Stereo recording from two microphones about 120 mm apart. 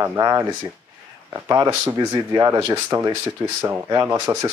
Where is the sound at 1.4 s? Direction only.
35° right (ahead or behind).